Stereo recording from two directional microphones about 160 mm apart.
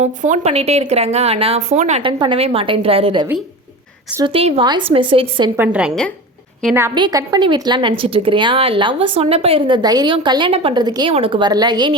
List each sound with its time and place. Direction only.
0.0 s speech: 45° right (ahead or behind)
2.0 s speech: 30° right (ahead or behind)
5.5 s a woman's voice: 10° right (ahead or behind)
6.9 s a woman's voice: 25° right (ahead or behind)